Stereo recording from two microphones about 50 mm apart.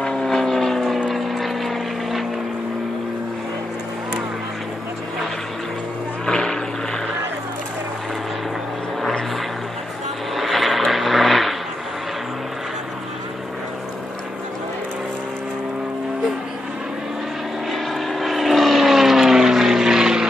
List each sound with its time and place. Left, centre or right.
0.0 s vehicle: centre
6.2 s vehicle: centre
10.3 s vehicle: centre
17.6 s vehicle: centre